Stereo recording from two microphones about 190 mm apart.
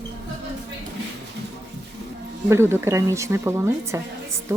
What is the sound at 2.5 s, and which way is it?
Speech, 15° right (ahead or behind).